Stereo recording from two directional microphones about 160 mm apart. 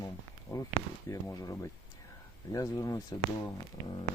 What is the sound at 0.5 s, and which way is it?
Speech, 20° left (ahead or behind).